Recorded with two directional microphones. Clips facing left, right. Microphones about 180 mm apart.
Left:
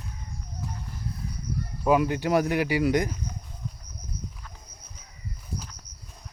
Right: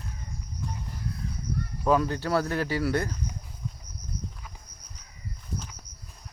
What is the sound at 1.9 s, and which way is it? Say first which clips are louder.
Speech: left 2 dB; 15° left (ahead or behind).